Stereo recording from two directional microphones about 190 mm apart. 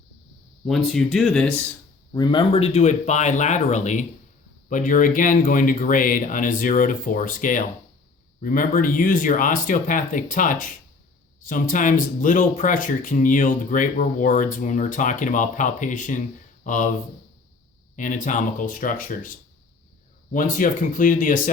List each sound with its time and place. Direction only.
0.7 s speech: centre (ahead or behind)
2.1 s speech: 25° left (ahead or behind); by 16.9 s 40° left (ahead or behind)
17.9 s speech: 40° left (ahead or behind)
20.3 s speech: 45° left (ahead or behind)